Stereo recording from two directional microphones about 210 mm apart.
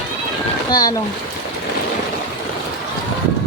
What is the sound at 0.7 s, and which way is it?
Speech, 20° left (ahead or behind).